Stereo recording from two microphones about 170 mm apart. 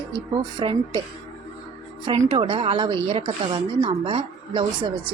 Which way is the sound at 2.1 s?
30° right (ahead or behind).